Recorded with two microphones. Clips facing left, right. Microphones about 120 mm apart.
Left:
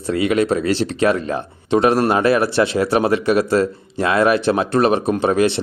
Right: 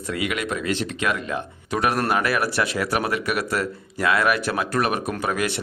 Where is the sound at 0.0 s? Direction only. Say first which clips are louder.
Left 9 dB; 30° left (ahead or behind).